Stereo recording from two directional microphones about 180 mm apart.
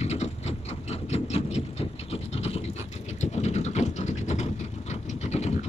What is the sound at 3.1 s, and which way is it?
Vehicle, 40° left (ahead or behind).